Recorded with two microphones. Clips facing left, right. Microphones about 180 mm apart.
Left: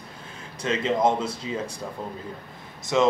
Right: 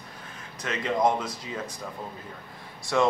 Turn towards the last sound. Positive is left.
turn(degrees=20)  # may be behind; listen again after turning